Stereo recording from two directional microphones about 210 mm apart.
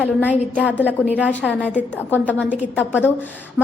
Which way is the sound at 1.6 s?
5° left (ahead or behind).